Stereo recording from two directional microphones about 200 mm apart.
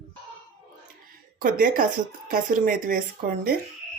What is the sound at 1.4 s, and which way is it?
A woman's voice, 45° right (ahead or behind).